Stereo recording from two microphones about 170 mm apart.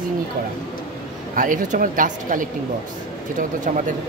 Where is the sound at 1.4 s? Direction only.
50° right (ahead or behind).